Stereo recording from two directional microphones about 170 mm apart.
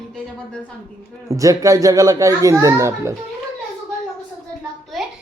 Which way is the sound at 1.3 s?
20° right (ahead or behind).